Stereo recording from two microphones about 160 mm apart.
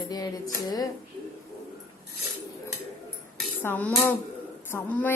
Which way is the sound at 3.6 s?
10° left (ahead or behind).